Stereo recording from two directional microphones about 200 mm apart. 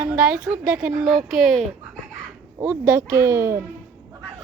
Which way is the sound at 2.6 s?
10° right (ahead or behind).